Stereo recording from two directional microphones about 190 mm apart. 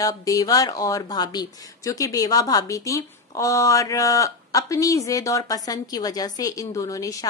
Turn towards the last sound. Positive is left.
turn(degrees=20)  # may be behind; listen again after turning